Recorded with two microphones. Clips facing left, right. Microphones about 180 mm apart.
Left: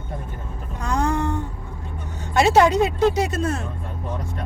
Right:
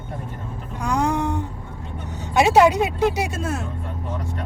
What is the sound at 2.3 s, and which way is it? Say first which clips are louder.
Speech: right 1 dB; 10° right (ahead or behind).